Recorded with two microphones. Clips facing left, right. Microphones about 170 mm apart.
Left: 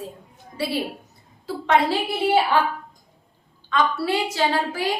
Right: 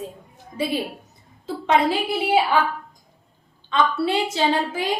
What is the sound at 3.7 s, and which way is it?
A woman's voice, 20° right (ahead or behind).